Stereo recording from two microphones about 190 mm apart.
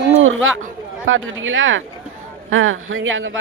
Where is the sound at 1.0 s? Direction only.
90° right.